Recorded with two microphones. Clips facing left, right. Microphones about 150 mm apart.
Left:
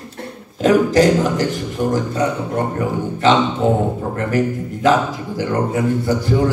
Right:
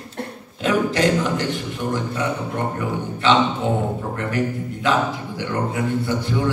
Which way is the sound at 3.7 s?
35° left (ahead or behind).